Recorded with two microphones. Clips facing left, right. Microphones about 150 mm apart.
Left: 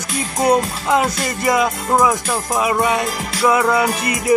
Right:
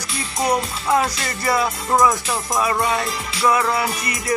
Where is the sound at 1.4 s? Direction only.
15° left (ahead or behind).